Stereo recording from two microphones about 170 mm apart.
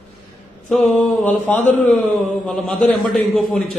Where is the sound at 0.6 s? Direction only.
Centre (ahead or behind).